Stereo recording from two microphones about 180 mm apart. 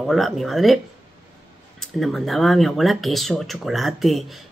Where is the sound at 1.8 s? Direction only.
Centre (ahead or behind).